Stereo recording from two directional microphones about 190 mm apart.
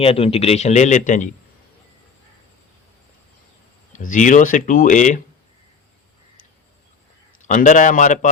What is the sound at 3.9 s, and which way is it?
Speech, 40° left (ahead or behind).